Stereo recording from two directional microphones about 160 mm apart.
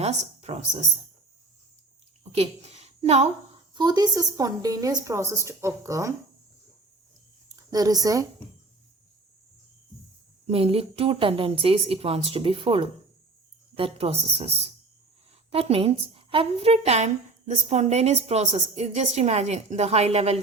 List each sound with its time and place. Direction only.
0.0 s speech: 40° right (ahead or behind)
2.3 s a woman's voice: 40° right (ahead or behind)
3.8 s a woman's voice: 25° right (ahead or behind)
7.4 s a woman's voice: 25° right (ahead or behind)
10.4 s a woman's voice: 40° right (ahead or behind)